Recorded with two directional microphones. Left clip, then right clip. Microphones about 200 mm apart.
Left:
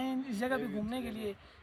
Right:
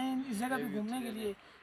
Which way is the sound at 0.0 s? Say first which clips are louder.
Even; 35° left (ahead or behind).